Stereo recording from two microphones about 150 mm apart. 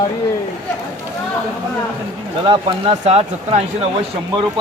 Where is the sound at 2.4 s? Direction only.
35° right (ahead or behind).